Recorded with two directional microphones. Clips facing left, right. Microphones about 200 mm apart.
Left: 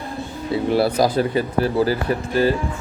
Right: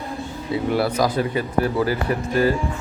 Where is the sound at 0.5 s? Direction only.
30° left (ahead or behind).